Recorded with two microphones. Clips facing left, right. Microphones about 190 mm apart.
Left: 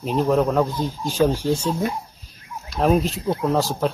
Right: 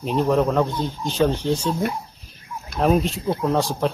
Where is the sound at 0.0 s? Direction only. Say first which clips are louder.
Even; centre (ahead or behind).